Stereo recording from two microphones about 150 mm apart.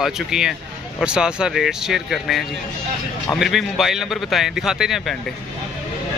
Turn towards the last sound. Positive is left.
turn(degrees=-5)  # may be behind; listen again after turning